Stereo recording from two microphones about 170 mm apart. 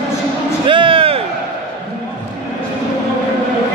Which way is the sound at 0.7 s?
30° right (ahead or behind).